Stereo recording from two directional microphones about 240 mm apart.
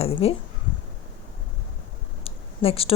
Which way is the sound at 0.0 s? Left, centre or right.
Left.